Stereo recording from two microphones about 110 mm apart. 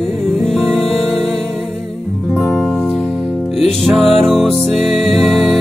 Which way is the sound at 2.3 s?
10° left (ahead or behind).